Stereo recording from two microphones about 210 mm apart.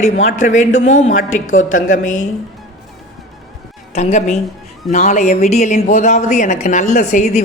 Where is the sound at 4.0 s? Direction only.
35° left (ahead or behind).